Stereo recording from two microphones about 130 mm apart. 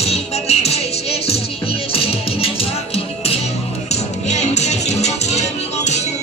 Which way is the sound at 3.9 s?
60° left (ahead or behind).